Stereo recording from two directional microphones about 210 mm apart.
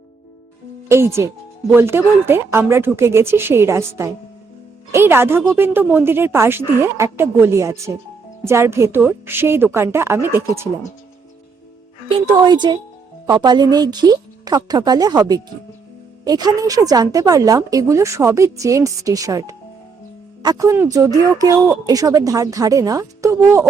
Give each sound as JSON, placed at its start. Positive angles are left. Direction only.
{"t": 0.9, "sound": "a woman's voice", "side_deg": -10}
{"t": 12.0, "sound": "a woman's voice", "side_deg": -25}